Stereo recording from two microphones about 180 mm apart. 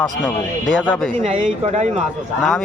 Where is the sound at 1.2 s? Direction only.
40° right (ahead or behind).